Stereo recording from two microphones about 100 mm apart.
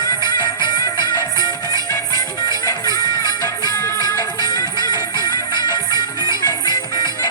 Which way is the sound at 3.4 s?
40° left (ahead or behind).